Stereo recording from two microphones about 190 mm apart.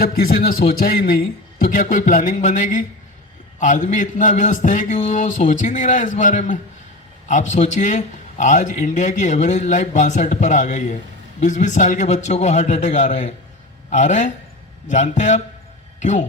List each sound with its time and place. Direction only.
0.0 s a man's voice: 50° left (ahead or behind)